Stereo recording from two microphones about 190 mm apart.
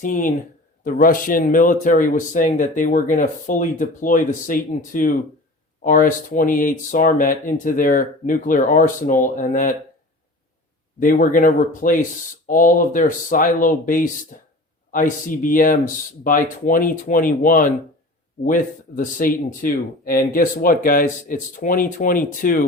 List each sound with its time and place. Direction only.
0.0 s speech: 45° left (ahead or behind)
11.0 s speech: 45° left (ahead or behind)